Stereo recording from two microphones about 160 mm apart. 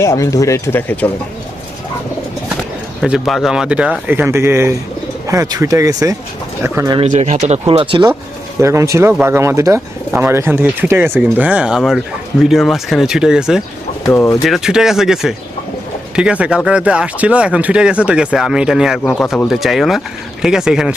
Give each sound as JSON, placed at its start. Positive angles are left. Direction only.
{"t": 0.0, "sound": "speech", "side_deg": 20}
{"t": 3.0, "sound": "speech", "side_deg": 0}
{"t": 7.1, "sound": "speech", "side_deg": -45}
{"t": 7.7, "sound": "speech", "side_deg": -35}
{"t": 8.6, "sound": "speech", "side_deg": -20}
{"t": 14.0, "sound": "speech", "side_deg": 15}
{"t": 14.4, "sound": "speech", "side_deg": 0}